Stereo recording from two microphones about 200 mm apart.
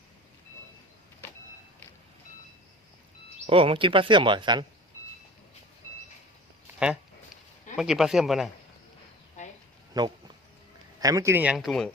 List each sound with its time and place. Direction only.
3.4 s speech: 30° right (ahead or behind)
7.8 s speech: centre (ahead or behind)
9.4 s insect: 35° left (ahead or behind)
9.9 s a sound: 20° right (ahead or behind)
11.0 s speech: 15° right (ahead or behind); by 11.9 s centre (ahead or behind)